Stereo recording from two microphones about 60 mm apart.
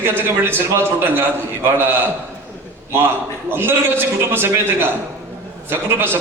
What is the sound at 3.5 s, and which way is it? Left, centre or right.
A man's voice, right.